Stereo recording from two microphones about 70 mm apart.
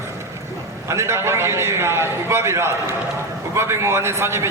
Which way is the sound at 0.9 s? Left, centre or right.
Right.